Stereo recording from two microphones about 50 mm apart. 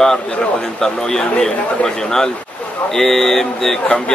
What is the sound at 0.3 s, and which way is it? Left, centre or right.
Speech, centre.